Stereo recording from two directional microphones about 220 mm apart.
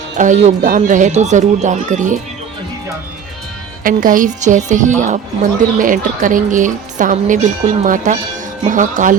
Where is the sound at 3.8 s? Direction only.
40° right (ahead or behind).